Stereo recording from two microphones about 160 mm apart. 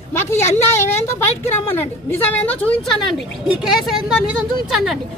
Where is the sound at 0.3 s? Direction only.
15° left (ahead or behind).